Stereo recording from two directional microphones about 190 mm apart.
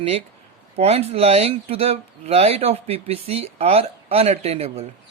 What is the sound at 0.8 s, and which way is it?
Speech, 30° right (ahead or behind).